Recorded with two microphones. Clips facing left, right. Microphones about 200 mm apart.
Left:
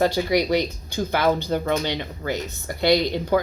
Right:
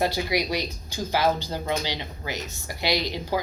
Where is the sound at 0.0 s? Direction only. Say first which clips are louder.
Left 5 dB; 50° left (ahead or behind).